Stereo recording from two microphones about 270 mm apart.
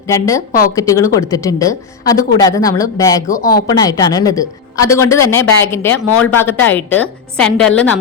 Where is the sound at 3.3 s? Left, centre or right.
Left.